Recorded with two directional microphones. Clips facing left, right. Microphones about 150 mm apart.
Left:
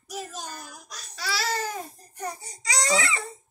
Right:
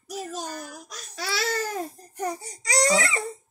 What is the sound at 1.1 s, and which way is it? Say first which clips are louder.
Babbling: right 1 dB; 55° right (ahead or behind).